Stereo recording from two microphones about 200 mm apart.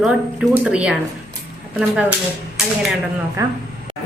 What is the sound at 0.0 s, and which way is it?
A woman's voice, 5° right (ahead or behind).